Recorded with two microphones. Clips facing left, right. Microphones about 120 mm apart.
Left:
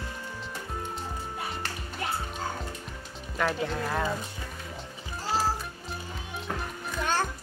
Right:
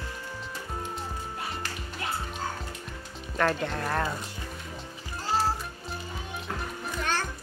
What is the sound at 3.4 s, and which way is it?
Speech, 5° left (ahead or behind).